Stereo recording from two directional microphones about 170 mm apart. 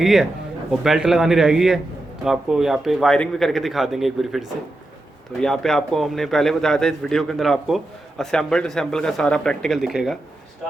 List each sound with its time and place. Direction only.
0.0 s a man's voice: centre (ahead or behind)